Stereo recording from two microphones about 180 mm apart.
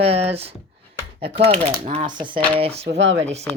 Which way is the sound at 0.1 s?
35° right (ahead or behind).